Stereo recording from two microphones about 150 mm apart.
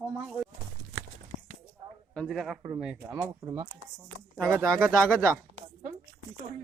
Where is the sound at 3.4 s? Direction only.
25° right (ahead or behind).